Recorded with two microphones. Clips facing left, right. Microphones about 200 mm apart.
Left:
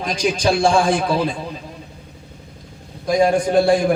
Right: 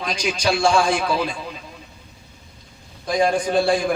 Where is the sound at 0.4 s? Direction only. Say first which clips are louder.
Left 2 dB; 30° left (ahead or behind).